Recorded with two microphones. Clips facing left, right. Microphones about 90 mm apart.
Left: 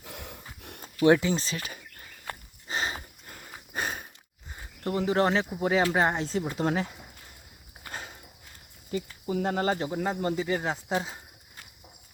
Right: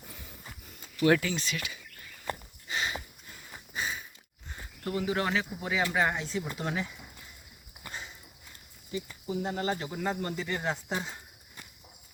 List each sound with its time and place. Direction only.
0.0 s snort: 70° left (ahead or behind)
1.0 s speech: 25° left (ahead or behind)
1.3 s speech: 35° left (ahead or behind)
2.6 s dog: 35° left (ahead or behind)
3.3 s a sound: 55° left (ahead or behind)
4.8 s speech: 35° left (ahead or behind)
7.9 s horse: 55° left (ahead or behind)
8.9 s speech: 65° left (ahead or behind)
9.7 s speech: 25° left (ahead or behind); by 10.9 s 10° left (ahead or behind)